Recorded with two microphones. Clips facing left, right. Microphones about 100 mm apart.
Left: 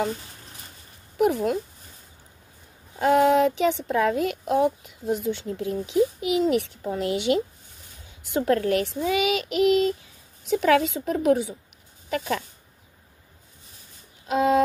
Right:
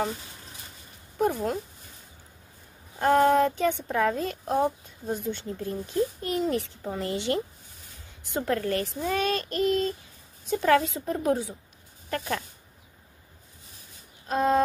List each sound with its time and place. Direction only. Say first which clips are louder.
1.2 s speech: left 4 dB; 80° left
3.0 s speech: left 2 dB; 85° left
14.2 s a sound: left 3 dB; 90° left